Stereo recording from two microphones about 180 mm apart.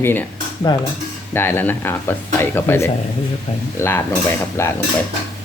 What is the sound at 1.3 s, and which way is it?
Speech, 10° left (ahead or behind).